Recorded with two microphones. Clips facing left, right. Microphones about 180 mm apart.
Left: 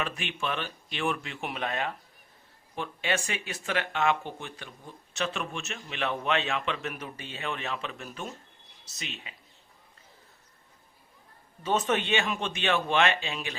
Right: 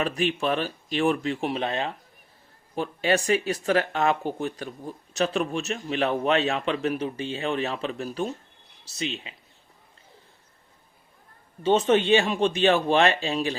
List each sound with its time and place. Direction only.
0.0 s speech: 35° right (ahead or behind)
11.6 s speech: 30° right (ahead or behind)